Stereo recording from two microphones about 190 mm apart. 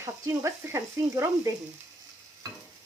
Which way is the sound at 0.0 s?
15° right (ahead or behind).